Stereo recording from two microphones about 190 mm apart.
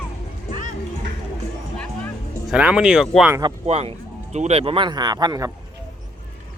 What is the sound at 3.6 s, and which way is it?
Speech, 35° right (ahead or behind).